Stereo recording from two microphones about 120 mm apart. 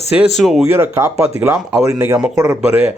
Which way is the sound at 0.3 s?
Centre (ahead or behind).